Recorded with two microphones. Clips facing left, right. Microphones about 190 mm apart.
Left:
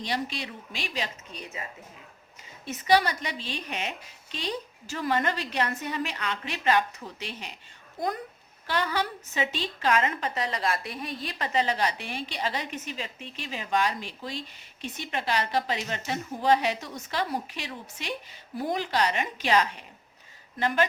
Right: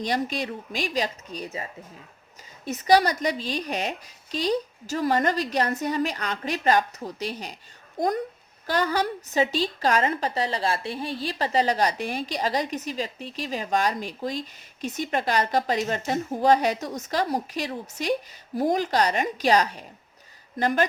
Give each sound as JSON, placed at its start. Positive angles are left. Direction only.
{"t": 0.0, "sound": "a woman's voice", "side_deg": -45}
{"t": 2.6, "sound": "a woman's voice", "side_deg": -40}